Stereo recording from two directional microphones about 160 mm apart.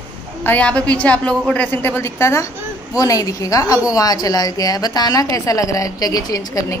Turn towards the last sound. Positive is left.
turn(degrees=20)  # may be behind; listen again after turning